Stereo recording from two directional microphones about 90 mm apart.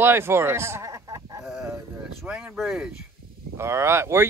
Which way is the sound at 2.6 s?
5° right (ahead or behind).